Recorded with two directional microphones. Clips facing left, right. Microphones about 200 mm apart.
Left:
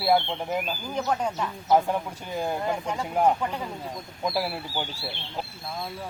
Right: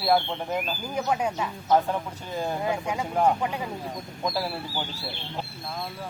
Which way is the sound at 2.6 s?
10° right (ahead or behind).